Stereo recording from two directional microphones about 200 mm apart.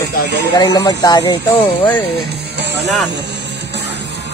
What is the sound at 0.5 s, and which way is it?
Speech, 20° left (ahead or behind).